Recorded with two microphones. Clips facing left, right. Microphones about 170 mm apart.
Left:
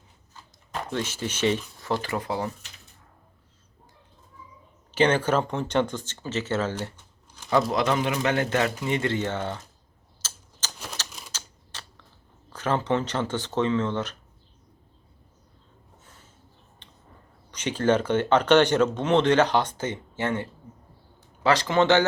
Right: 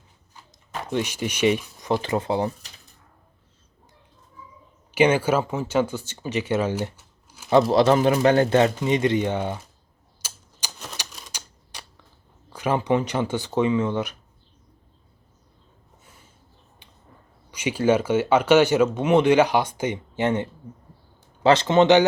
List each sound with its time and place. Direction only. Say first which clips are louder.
0.9 s speech: right 5 dB; 15° right (ahead or behind)
4.9 s speech: right 3 dB; 10° right (ahead or behind)
7.5 s speech: right 6 dB; 30° right (ahead or behind); by 9.6 s 15° right (ahead or behind)
10.2 s typewriter: right 1 dB; 15° right (ahead or behind)
12.5 s speech: right 3 dB; 10° right (ahead or behind)
16.8 s a sound: left 1 dB; 10° right (ahead or behind)
17.5 s speech: right 2 dB; 10° right (ahead or behind)